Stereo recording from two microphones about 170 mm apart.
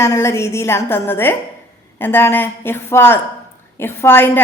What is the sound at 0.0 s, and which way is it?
A woman's voice, 15° left (ahead or behind).